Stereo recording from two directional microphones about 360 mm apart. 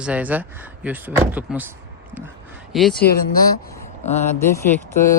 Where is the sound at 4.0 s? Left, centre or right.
Centre.